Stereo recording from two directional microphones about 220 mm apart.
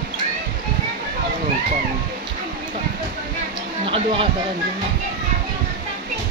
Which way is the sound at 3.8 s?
25° right (ahead or behind).